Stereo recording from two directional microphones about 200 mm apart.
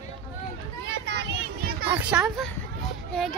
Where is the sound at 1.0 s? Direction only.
55° right (ahead or behind).